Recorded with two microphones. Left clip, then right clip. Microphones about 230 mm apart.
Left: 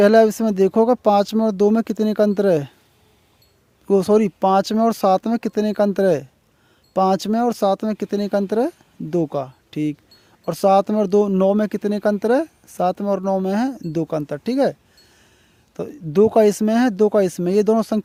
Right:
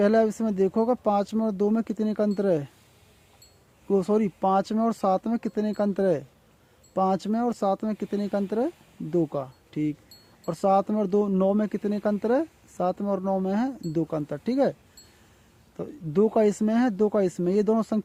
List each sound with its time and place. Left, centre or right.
0.0 s speech: left
3.8 s speech: left